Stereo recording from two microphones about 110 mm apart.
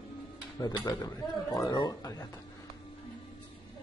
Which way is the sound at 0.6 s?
35° left (ahead or behind).